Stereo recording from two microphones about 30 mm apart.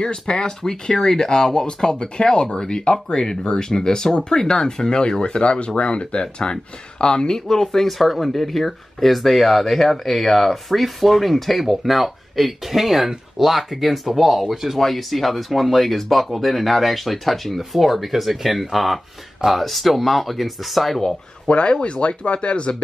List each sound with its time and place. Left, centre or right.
0.0 s speech: left; by 14.4 s centre
14.4 s speech: centre
14.8 s speech: centre
21.5 s speech: left